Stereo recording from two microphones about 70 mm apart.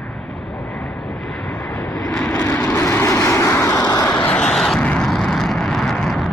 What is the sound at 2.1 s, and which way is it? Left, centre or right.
Vehicle, centre.